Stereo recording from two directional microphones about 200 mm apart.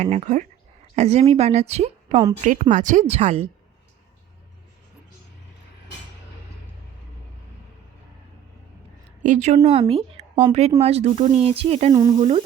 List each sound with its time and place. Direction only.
0.0 s a woman's voice: 35° right (ahead or behind)
9.2 s a woman's voice: 35° right (ahead or behind)
11.9 s sizzle: 20° right (ahead or behind)